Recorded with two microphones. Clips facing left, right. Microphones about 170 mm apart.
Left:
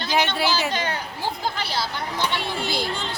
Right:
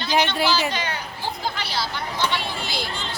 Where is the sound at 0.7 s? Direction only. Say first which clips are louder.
Left 2 dB; 50° left (ahead or behind).